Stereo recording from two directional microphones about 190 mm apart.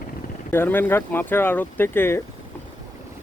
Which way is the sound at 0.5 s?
10° left (ahead or behind).